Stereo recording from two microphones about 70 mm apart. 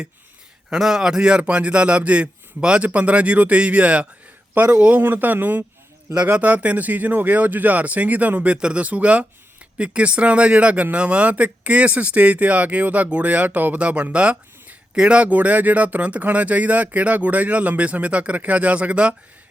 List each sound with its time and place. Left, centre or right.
0.7 s a man's voice: centre